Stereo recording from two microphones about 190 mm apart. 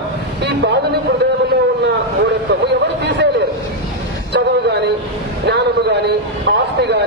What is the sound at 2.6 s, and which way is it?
Speech, 65° right (ahead or behind).